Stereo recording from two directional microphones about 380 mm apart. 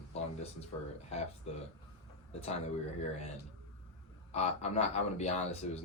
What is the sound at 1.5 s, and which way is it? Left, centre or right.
Speech, centre.